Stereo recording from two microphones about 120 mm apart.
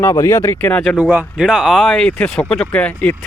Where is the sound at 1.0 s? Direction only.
15° right (ahead or behind).